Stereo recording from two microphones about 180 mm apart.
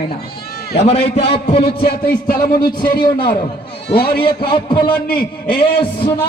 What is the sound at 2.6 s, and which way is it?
A man's voice, 25° left (ahead or behind).